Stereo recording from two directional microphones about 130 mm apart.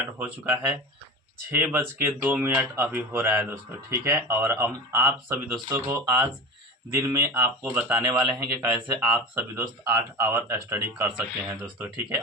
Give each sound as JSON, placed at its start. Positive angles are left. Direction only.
{"t": 0.0, "sound": "speech", "side_deg": -15}
{"t": 9.6, "sound": "speech", "side_deg": -20}